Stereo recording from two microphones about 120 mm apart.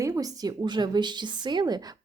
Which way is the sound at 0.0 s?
30° right (ahead or behind).